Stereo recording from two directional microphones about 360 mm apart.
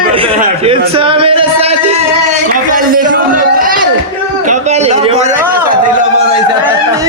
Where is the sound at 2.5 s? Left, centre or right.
Right.